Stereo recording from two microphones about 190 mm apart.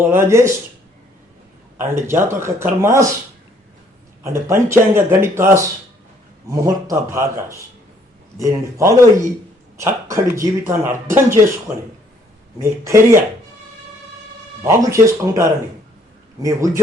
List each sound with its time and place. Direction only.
0.1 s speech: 15° right (ahead or behind)
1.8 s speech: 15° right (ahead or behind)
4.2 s speech: 15° right (ahead or behind)
12.5 s speech: 15° right (ahead or behind)
14.6 s speech: 15° right (ahead or behind)